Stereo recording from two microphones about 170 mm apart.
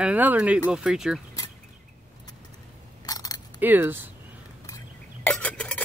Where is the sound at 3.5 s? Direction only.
10° right (ahead or behind).